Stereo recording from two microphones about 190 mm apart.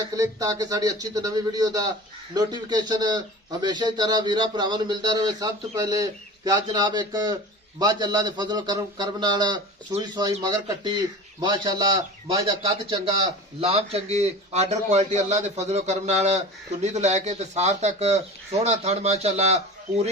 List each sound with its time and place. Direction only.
0.2 s a man's voice: 20° right (ahead or behind); by 20.1 s 35° right (ahead or behind)